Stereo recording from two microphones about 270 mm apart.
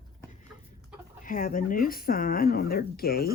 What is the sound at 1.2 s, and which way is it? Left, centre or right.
Speech, left.